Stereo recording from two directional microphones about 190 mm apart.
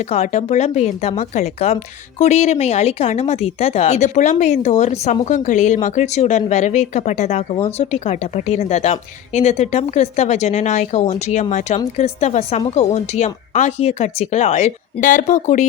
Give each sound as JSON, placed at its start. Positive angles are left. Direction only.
{"t": 0.0, "sound": "speech", "side_deg": 35}